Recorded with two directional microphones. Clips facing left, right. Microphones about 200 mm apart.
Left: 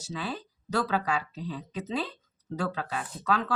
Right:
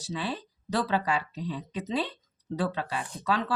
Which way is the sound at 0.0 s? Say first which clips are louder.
Right 2 dB; 35° right (ahead or behind).